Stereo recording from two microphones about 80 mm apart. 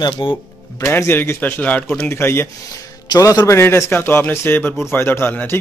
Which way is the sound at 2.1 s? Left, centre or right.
Left.